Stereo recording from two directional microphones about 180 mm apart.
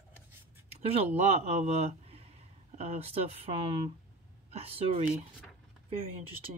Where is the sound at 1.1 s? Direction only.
35° right (ahead or behind).